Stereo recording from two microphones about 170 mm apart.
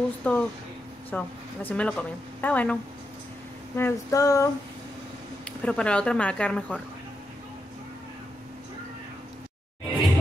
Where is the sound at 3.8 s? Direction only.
20° left (ahead or behind).